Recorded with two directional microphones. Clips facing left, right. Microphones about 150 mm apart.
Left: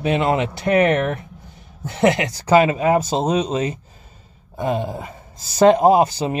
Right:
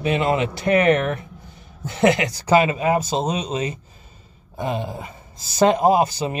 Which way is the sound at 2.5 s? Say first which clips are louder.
Left 3 dB; 40° left (ahead or behind).